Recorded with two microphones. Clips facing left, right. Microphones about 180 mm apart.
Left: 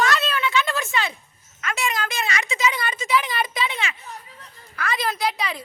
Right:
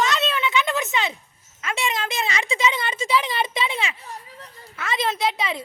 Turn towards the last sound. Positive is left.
turn(degrees=-25)  # may be behind; listen again after turning